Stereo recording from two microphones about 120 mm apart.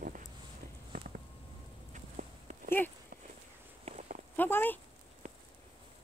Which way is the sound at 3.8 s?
80° right.